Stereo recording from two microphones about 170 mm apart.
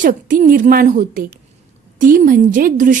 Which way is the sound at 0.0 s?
55° right (ahead or behind).